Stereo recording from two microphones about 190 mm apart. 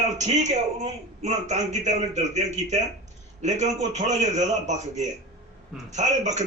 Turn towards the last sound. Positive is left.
turn(degrees=-40)  # may be behind; listen again after turning